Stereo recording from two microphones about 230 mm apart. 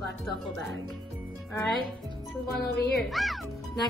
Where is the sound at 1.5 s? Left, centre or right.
Centre.